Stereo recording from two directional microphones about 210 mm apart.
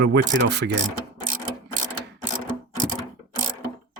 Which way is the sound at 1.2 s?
40° right (ahead or behind).